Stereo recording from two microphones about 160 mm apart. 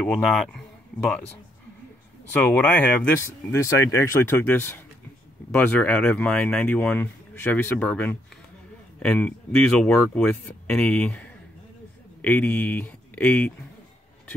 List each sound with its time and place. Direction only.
0.0 s speech: centre (ahead or behind)
2.3 s speech: 10° left (ahead or behind)